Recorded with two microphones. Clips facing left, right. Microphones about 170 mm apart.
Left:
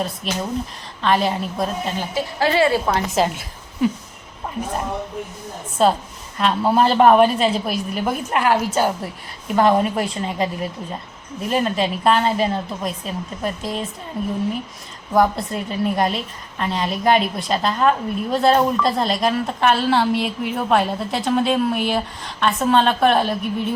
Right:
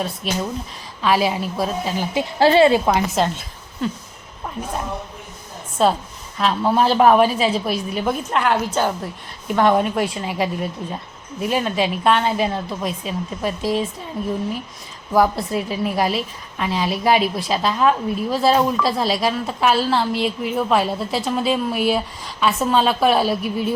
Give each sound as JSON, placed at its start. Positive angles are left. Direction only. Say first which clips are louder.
{"t": 0.2, "sound": "a woman's voice", "louder": "even", "side_deg": 0}
{"t": 2.4, "sound": "a woman's voice", "louder": "right 4 dB", "side_deg": -25}
{"t": 3.2, "sound": "a woman's voice", "louder": "left 1 dB", "side_deg": 5}
{"t": 5.8, "sound": "a woman's voice", "louder": "left 1 dB", "side_deg": 0}
{"t": 15.1, "sound": "a woman's voice", "louder": "right 1 dB", "side_deg": -5}